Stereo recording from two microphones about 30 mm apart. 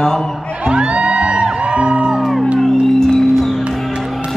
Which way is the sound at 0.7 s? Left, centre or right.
Right.